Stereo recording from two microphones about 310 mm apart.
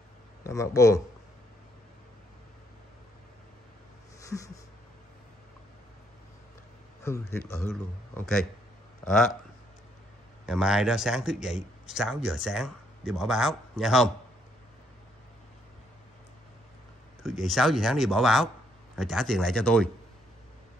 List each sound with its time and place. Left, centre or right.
0.4 s speech: centre
4.2 s a sound: centre
7.0 s speech: centre
9.0 s speech: centre
10.4 s speech: centre
17.2 s speech: centre